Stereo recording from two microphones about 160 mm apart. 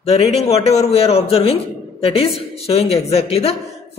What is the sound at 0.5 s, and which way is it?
Speech, 40° left (ahead or behind).